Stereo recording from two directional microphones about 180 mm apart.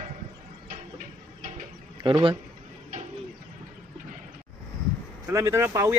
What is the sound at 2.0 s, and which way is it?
Speech, 25° right (ahead or behind).